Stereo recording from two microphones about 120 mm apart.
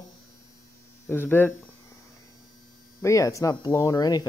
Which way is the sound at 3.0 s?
25° left (ahead or behind).